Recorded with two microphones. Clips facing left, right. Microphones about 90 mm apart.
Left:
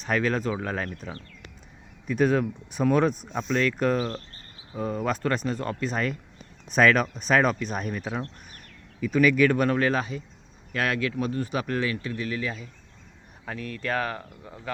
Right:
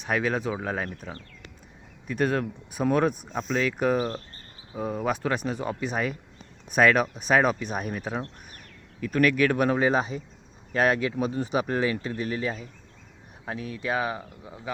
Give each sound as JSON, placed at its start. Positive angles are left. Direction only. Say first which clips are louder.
{"t": 0.0, "sound": "speech", "louder": "left 1 dB", "side_deg": -5}
{"t": 2.0, "sound": "speech", "louder": "left 3 dB", "side_deg": 0}
{"t": 13.4, "sound": "speech", "louder": "right 1 dB", "side_deg": -10}